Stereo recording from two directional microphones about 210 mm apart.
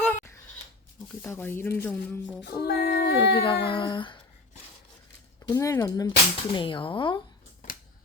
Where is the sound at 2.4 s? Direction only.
50° left (ahead or behind).